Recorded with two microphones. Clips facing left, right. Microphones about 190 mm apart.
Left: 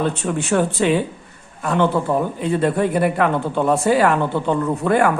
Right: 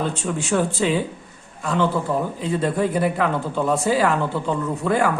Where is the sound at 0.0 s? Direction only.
60° left (ahead or behind).